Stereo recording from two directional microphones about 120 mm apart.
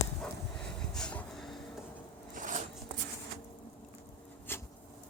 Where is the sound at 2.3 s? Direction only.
90° right.